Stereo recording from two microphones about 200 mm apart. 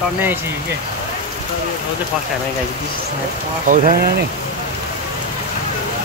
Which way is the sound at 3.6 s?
40° right (ahead or behind).